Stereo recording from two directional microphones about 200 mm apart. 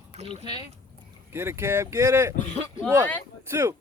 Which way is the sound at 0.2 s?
30° right (ahead or behind).